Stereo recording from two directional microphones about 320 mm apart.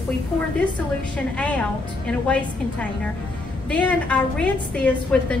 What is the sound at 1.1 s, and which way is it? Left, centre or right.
Speech, centre.